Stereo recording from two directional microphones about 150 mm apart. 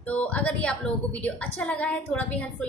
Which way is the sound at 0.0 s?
10° left (ahead or behind).